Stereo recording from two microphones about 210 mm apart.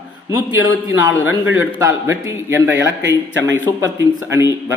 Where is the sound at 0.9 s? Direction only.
10° right (ahead or behind).